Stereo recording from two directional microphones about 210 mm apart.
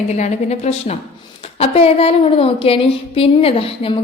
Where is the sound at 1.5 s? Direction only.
30° left (ahead or behind).